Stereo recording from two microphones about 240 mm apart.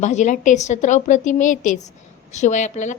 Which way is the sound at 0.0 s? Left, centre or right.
Left.